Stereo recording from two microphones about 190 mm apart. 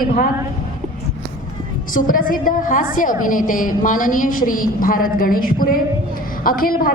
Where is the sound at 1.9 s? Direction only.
45° left (ahead or behind).